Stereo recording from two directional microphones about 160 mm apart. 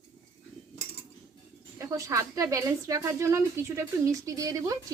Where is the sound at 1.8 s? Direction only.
20° right (ahead or behind).